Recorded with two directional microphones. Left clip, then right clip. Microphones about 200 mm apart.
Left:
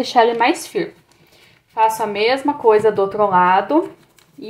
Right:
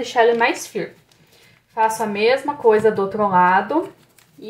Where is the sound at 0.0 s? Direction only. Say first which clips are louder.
Left 2 dB; 35° left (ahead or behind).